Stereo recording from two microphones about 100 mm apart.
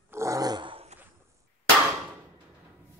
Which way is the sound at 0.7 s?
80° right.